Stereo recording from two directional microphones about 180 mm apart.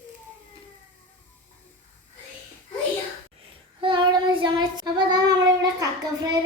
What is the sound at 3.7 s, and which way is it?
Child singing, 25° right (ahead or behind).